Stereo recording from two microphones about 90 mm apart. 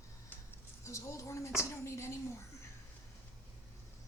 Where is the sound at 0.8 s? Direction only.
35° left (ahead or behind).